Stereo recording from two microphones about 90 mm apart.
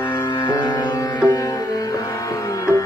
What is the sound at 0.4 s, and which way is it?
Music, 60° left (ahead or behind).